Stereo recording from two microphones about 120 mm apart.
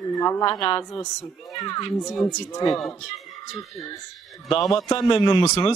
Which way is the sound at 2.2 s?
30° left (ahead or behind).